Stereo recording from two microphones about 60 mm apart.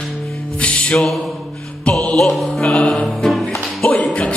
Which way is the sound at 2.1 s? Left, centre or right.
Centre.